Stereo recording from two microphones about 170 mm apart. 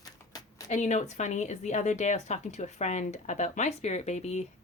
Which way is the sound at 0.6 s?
45° left (ahead or behind).